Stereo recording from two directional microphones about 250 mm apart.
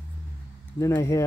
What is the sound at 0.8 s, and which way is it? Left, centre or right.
Speech, centre.